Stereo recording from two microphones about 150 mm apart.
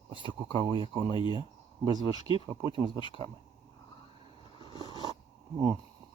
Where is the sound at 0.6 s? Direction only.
30° right (ahead or behind).